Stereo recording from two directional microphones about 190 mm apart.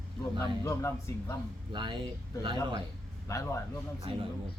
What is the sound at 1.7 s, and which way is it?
A man's voice, 25° right (ahead or behind).